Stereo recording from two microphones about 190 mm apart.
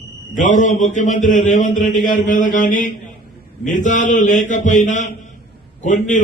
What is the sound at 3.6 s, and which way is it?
Mantra, 40° left (ahead or behind).